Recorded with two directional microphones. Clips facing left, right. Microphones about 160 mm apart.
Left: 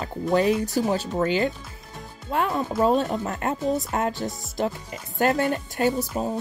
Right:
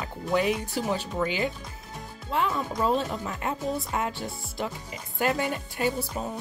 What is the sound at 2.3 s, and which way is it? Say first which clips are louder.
Speech: left 3 dB; 45° left (ahead or behind).